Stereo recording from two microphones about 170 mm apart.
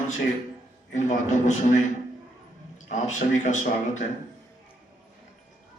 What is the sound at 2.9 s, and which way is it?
Speech, 45° left (ahead or behind).